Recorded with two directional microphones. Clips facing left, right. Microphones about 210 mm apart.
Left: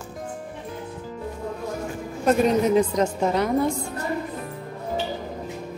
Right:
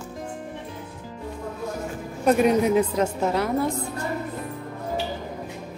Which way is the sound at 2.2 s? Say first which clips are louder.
Even; 10° right (ahead or behind).